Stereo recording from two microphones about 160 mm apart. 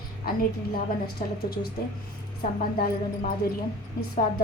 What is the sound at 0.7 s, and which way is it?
Speech, 70° left (ahead or behind).